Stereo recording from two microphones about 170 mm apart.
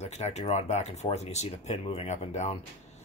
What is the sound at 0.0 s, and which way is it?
Speech, 40° left (ahead or behind).